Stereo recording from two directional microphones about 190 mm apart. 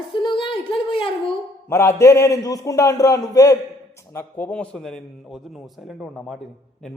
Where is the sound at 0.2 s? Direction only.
25° left (ahead or behind).